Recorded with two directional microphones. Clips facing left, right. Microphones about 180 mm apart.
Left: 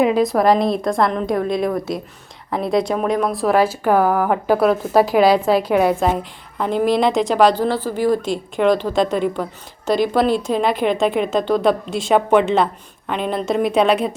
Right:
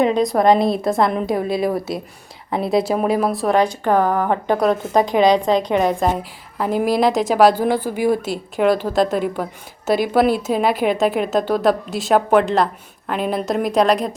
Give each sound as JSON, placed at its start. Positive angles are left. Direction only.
{"t": 0.0, "sound": "a woman's voice", "side_deg": 5}